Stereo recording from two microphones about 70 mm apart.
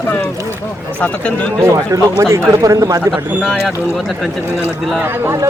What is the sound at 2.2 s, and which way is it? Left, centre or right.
Speech, right.